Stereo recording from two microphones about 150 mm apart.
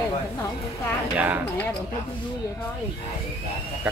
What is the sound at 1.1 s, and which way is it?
Speech, 10° right (ahead or behind).